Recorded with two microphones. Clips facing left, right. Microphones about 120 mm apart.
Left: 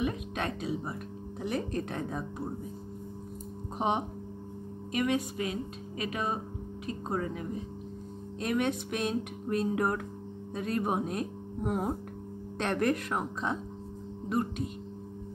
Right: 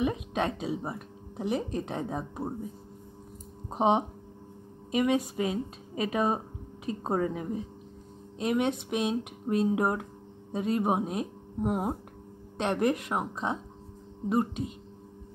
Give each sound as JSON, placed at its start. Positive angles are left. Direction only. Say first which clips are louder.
{"t": 0.0, "sound": "speech", "louder": "right 4 dB", "side_deg": -25}
{"t": 3.7, "sound": "a woman's voice", "louder": "right 5 dB", "side_deg": -25}